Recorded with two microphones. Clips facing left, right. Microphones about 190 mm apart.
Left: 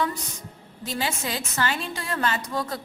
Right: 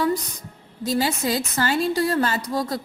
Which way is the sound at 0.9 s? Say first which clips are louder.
Right 7 dB; 40° right (ahead or behind).